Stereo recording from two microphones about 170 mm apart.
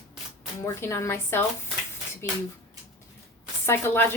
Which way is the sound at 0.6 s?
15° left (ahead or behind).